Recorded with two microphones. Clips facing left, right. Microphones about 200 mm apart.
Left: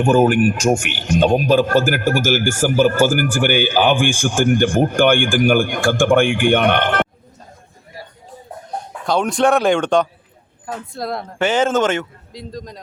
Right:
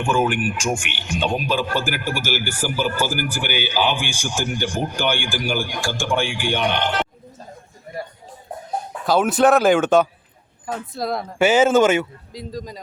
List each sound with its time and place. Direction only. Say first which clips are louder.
0.0 s a man's voice: left 7 dB; 40° left (ahead or behind); by 7.1 s 55° left (ahead or behind)
9.0 s speech: even; 5° right (ahead or behind)